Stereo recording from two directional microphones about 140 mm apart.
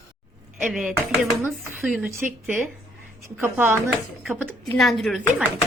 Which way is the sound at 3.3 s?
15° right (ahead or behind).